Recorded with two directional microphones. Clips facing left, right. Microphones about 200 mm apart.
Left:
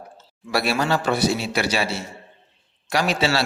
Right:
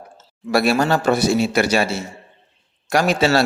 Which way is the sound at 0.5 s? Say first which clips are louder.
Right 5 dB; 45° right (ahead or behind).